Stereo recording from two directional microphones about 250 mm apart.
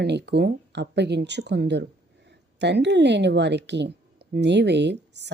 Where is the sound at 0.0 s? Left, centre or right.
Right.